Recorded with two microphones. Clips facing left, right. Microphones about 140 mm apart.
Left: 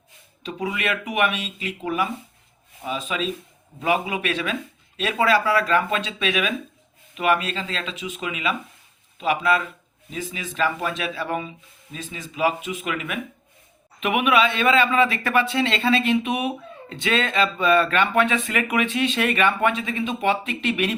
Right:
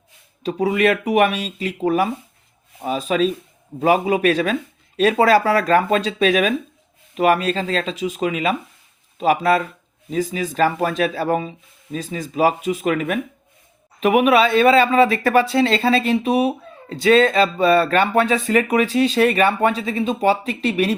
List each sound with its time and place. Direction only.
0.4 s speech: 40° right (ahead or behind)